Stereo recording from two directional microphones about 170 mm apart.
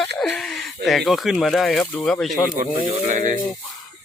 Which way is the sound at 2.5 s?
50° right (ahead or behind).